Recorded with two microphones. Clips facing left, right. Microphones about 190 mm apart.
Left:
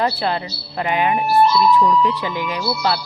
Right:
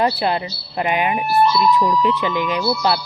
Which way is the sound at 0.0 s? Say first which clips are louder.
Right 2 dB; 15° right (ahead or behind).